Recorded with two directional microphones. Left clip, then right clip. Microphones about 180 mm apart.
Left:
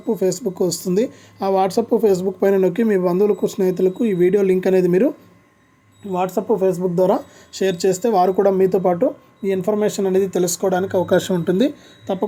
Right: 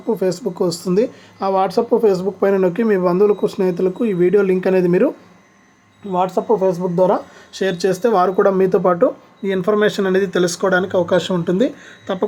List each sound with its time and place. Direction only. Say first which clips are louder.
0.2 s speech: right 1 dB; 20° left (ahead or behind)